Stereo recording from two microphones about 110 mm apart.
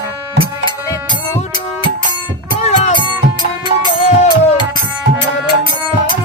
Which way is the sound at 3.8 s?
45° left (ahead or behind).